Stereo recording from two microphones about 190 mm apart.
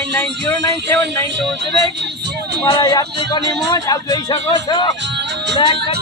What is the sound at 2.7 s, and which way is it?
Speech, 25° left (ahead or behind).